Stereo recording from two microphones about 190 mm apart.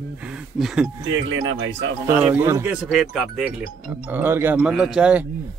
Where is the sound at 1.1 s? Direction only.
90° right.